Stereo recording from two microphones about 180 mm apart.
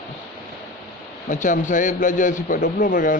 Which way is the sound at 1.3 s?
45° left (ahead or behind).